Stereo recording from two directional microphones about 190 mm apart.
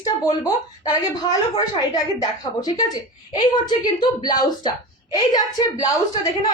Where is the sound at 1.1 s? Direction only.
20° left (ahead or behind).